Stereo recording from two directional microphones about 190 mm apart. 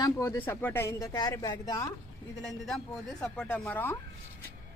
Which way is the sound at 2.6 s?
Centre (ahead or behind).